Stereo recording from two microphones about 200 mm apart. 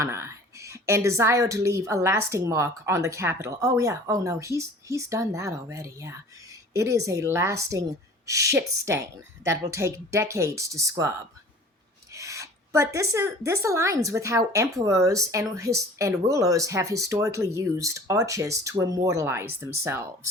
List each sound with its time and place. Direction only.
0.0 s speech: 15° right (ahead or behind)
12.1 s speech: 15° right (ahead or behind)